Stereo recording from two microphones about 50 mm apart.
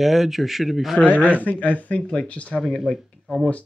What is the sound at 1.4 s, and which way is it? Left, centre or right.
Speech, left.